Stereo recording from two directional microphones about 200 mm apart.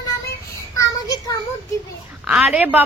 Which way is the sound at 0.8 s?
15° left (ahead or behind).